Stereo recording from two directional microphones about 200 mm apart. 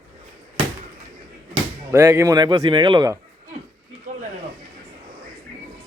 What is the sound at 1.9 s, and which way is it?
Speech, 15° right (ahead or behind).